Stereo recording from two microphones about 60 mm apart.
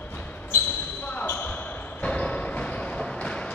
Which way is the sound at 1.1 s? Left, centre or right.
Left.